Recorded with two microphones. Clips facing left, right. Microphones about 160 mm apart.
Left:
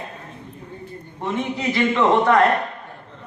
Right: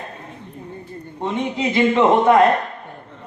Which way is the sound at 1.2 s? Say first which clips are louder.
Right 2 dB; 20° right (ahead or behind).